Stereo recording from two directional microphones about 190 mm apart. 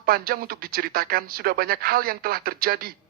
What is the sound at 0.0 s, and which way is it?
A man's voice, 50° right (ahead or behind).